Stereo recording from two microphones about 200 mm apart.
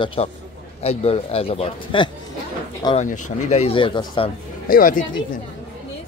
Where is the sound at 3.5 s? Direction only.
30° left (ahead or behind).